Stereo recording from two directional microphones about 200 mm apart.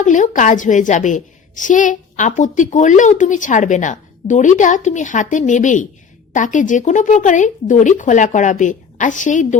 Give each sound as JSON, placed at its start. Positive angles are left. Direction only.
{"t": 0.0, "sound": "a woman's voice", "side_deg": 40}